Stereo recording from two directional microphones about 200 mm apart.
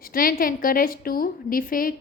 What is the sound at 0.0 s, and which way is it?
A woman's voice, 45° left (ahead or behind).